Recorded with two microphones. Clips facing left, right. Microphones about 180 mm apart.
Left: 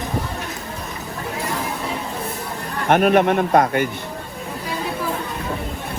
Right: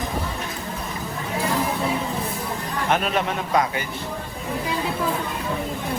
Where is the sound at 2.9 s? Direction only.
55° left (ahead or behind).